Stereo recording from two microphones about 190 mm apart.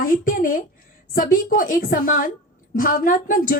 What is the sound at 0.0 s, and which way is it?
A woman's voice, 45° left (ahead or behind).